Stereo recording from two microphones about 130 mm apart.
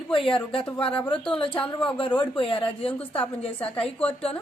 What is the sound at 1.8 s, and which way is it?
A man's voice, 40° left (ahead or behind).